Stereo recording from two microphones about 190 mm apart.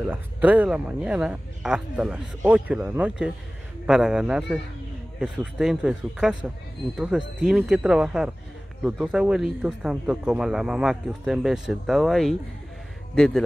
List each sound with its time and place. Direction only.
0.1 s speech: 10° right (ahead or behind)